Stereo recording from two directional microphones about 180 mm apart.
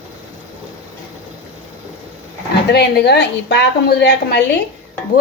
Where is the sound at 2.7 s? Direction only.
65° left (ahead or behind).